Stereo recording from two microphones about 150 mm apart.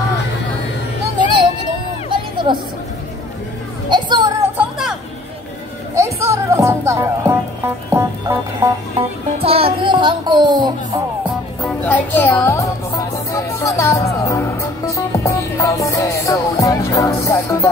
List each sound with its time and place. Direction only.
2.0 s music: 30° right (ahead or behind)
3.9 s music: 30° right (ahead or behind)
4.6 s a sound: 5° right (ahead or behind)
5.9 s music: 20° right (ahead or behind)
9.4 s music: 40° right (ahead or behind)
11.6 s music: 10° left (ahead or behind)